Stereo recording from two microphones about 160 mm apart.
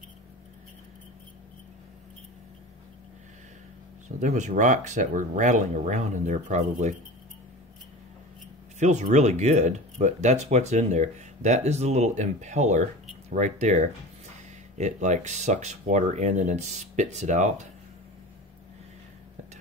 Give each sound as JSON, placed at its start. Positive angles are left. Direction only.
{"t": 4.2, "sound": "speech", "side_deg": -50}
{"t": 8.7, "sound": "speech", "side_deg": -45}